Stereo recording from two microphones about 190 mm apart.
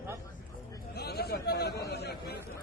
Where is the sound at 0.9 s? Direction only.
55° left (ahead or behind).